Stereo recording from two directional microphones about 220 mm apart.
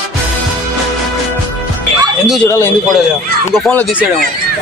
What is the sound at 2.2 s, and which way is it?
Speech, centre (ahead or behind).